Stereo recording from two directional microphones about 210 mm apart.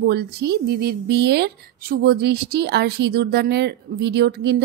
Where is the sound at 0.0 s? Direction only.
50° right (ahead or behind).